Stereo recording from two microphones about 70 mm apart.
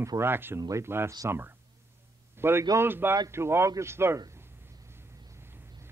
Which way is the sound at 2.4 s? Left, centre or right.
Right.